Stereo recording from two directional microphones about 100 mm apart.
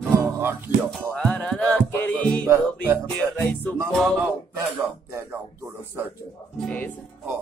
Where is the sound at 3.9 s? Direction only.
5° left (ahead or behind).